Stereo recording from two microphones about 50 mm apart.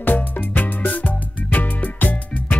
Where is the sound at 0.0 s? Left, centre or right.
Left.